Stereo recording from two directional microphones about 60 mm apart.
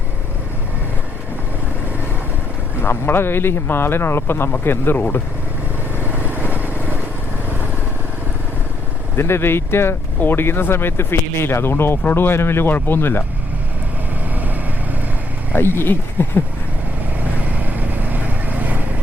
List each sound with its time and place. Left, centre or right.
2.8 s speech: left
6.0 s vehicle: right
9.1 s speech: left
15.5 s speech: left
17.2 s vehicle: right